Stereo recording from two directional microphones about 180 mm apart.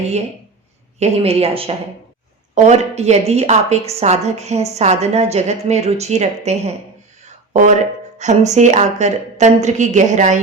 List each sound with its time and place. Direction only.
0.9 s a woman's voice: 35° right (ahead or behind)
7.3 s a sound: 40° right (ahead or behind)
8.2 s a woman's voice: 40° right (ahead or behind)